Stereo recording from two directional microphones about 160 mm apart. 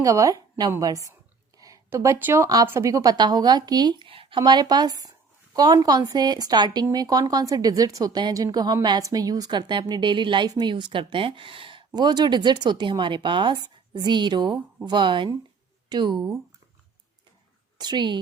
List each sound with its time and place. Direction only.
0.0 s speech: 20° right (ahead or behind)
17.7 s a woman's voice: 25° right (ahead or behind)